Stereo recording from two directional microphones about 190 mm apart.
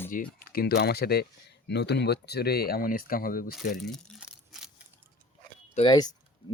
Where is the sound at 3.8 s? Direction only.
Centre (ahead or behind).